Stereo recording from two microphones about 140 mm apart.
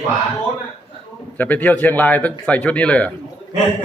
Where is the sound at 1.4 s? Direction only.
10° left (ahead or behind).